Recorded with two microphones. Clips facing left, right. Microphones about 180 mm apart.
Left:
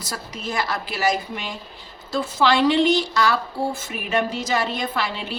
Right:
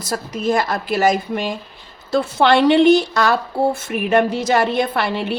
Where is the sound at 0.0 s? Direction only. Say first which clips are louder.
Right 10 dB; 50° right (ahead or behind).